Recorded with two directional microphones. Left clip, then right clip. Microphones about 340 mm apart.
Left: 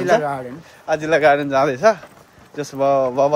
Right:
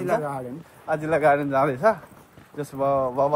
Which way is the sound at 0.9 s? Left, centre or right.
Left.